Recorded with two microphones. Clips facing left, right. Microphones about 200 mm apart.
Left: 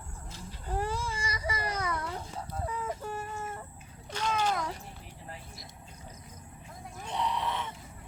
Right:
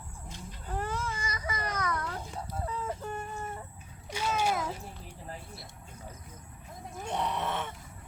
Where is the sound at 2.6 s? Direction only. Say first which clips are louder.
Left 1 dB; 10° left (ahead or behind).